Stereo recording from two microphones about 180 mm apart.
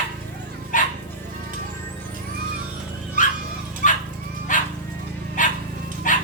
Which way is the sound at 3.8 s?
45° left (ahead or behind).